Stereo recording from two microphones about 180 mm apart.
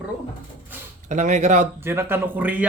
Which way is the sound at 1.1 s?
45° right (ahead or behind).